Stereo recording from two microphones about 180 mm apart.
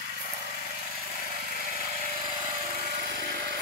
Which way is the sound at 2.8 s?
45° right (ahead or behind).